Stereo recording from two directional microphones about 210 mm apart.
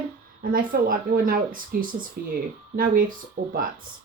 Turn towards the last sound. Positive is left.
turn(degrees=-40)  # may be behind; listen again after turning